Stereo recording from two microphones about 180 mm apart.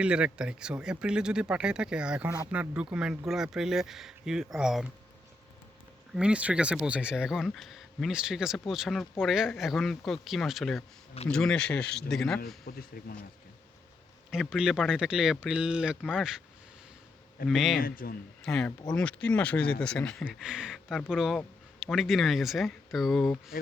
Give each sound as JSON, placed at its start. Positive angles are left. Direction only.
{"t": 0.0, "sound": "speech", "side_deg": -5}
{"t": 6.1, "sound": "speech", "side_deg": -5}
{"t": 12.7, "sound": "a man's voice", "side_deg": 60}
{"t": 14.3, "sound": "speech", "side_deg": -5}
{"t": 17.5, "sound": "speech", "side_deg": 0}
{"t": 17.7, "sound": "a man's voice", "side_deg": 55}
{"t": 18.4, "sound": "speech", "side_deg": 5}